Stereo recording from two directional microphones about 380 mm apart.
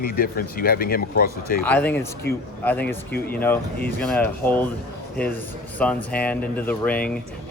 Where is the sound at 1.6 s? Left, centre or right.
Centre.